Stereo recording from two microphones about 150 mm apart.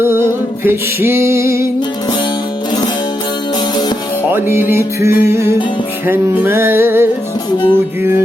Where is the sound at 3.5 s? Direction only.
30° left (ahead or behind).